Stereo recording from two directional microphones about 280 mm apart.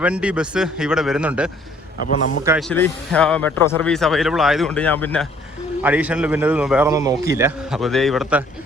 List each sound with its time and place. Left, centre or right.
0.0 s a man's voice: centre
2.0 s a man's voice: left
2.4 s speech: centre
2.6 s a man's voice: centre